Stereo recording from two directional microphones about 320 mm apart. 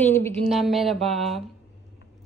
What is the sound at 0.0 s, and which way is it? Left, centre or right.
Speech, centre.